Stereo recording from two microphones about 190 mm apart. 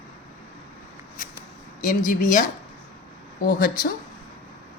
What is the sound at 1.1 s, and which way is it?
Shuffling cards, 50° left (ahead or behind).